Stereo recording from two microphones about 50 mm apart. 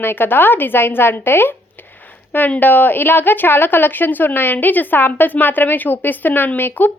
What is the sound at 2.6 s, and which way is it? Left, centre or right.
Speech, left.